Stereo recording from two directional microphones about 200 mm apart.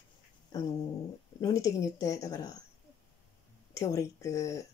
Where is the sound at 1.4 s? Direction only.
15° left (ahead or behind).